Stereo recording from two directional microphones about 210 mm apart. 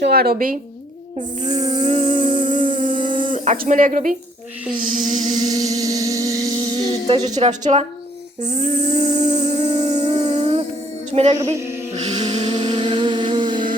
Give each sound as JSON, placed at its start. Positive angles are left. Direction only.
{"t": 0.0, "sound": "speech", "side_deg": -50}
{"t": 1.5, "sound": "a woman's voice", "side_deg": -20}
{"t": 2.6, "sound": "humming", "side_deg": -25}
{"t": 3.3, "sound": "speech", "side_deg": -35}
{"t": 5.0, "sound": "music", "side_deg": -20}
{"t": 7.1, "sound": "a woman's voice", "side_deg": -30}
{"t": 8.4, "sound": "humming", "side_deg": -30}
{"t": 11.1, "sound": "a woman's voice", "side_deg": -30}
{"t": 11.9, "sound": "music", "side_deg": -30}
{"t": 12.3, "sound": "a sound", "side_deg": -25}